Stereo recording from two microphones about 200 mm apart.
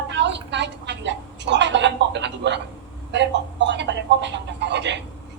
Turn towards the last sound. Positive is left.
turn(degrees=-60)  # may be behind; listen again after turning